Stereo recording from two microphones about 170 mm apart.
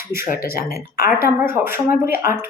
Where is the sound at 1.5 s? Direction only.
15° right (ahead or behind).